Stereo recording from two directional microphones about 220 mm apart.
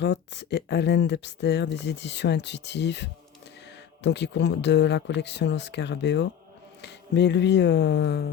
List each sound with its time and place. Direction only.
0.0 s speech: 50° left (ahead or behind)